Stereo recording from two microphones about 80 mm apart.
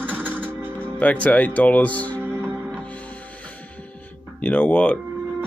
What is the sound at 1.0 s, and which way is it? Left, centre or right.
Speech, centre.